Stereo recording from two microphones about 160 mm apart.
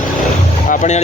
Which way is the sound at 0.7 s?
50° left (ahead or behind).